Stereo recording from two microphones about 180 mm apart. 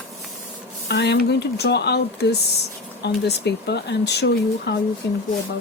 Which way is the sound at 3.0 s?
70° left (ahead or behind).